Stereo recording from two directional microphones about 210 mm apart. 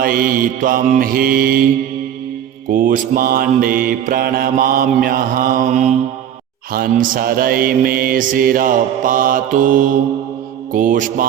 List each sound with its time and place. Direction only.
0.0 s mantra: 45° right (ahead or behind)